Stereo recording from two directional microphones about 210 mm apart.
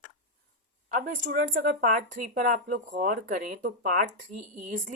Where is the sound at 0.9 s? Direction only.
40° right (ahead or behind).